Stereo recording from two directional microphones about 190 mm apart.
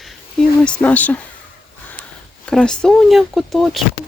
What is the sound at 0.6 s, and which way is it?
Speech, 5° left (ahead or behind).